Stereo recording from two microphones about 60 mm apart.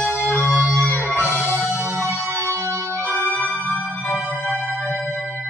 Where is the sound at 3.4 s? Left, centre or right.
Right.